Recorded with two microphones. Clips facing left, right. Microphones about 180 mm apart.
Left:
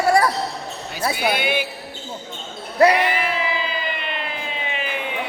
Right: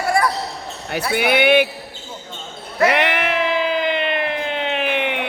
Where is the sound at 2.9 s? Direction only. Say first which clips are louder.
Even; 70° right (ahead or behind).